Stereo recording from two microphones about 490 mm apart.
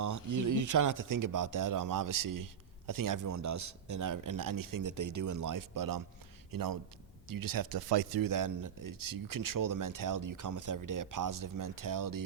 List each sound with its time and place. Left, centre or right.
0.0 s speech: right